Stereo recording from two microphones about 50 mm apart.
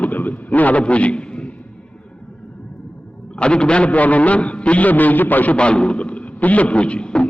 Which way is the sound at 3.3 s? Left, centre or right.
Centre.